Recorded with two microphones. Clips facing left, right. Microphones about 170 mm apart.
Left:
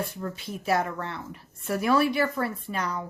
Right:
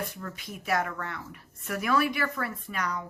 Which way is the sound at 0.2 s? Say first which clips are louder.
Left 5 dB; 30° left (ahead or behind).